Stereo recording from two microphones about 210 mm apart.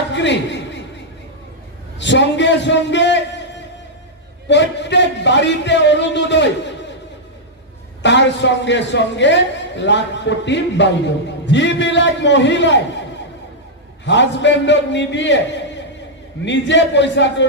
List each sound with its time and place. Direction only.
0.1 s a sound: 60° left (ahead or behind)
2.0 s a man's voice: 60° left (ahead or behind)
4.5 s a man's voice: 55° left (ahead or behind)
8.0 s a man's voice: 55° left (ahead or behind)
14.0 s a man's voice: 55° left (ahead or behind)